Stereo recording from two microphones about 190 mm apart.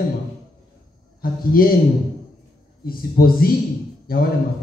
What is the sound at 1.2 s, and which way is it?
Speech, 50° left (ahead or behind).